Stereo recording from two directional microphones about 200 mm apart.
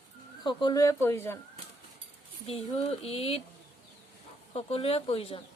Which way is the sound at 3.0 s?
30° left (ahead or behind).